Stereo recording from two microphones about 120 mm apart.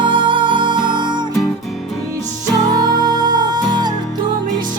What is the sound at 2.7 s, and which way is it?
Music, 35° right (ahead or behind).